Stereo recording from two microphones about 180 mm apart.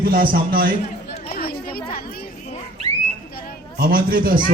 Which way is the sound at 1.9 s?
60° left (ahead or behind).